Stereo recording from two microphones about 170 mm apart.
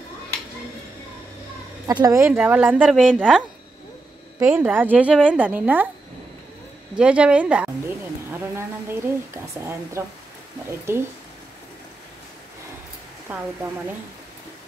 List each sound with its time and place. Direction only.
1.9 s speech: 20° right (ahead or behind); by 3.4 s centre (ahead or behind)
4.4 s speech: 15° right (ahead or behind)
7.0 s speech: 5° right (ahead or behind)
9.3 s speech: 15° right (ahead or behind)
13.3 s speech: 10° right (ahead or behind)